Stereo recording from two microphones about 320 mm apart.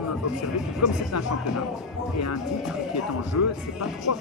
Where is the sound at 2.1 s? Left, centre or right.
Left.